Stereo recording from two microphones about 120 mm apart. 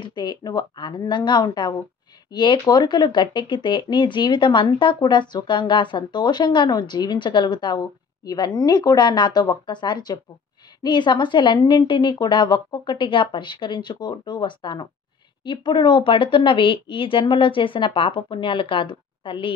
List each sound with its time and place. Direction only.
0.0 s speech: 40° left (ahead or behind)